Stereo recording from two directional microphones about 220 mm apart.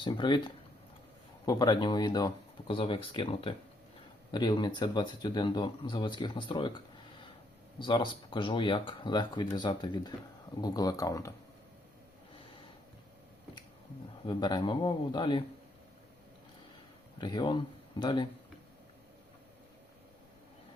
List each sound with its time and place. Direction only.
0.0 s speech: 20° left (ahead or behind)
14.3 s speech: 20° left (ahead or behind)
17.2 s speech: 20° left (ahead or behind)